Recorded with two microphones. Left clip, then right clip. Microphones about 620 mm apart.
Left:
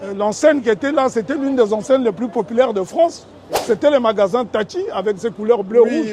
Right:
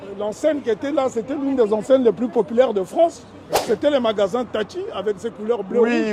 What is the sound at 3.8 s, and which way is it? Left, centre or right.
Speech, left.